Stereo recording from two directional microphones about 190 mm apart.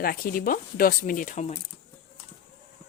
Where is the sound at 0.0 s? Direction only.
50° left (ahead or behind).